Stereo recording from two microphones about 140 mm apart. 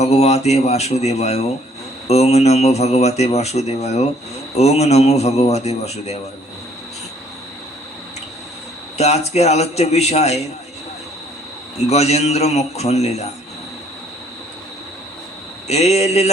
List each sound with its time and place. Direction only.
0.0 s speech: 50° left (ahead or behind)
9.0 s speech: 50° left (ahead or behind)
11.9 s speech: 50° left (ahead or behind)
15.6 s speech: 50° left (ahead or behind)